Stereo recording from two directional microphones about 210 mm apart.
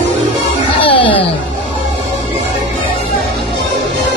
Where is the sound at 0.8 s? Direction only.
25° left (ahead or behind).